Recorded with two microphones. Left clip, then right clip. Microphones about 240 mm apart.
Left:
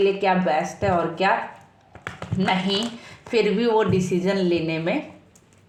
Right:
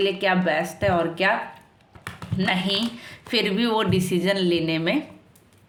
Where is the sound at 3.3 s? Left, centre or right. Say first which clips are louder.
Left 3 dB; right.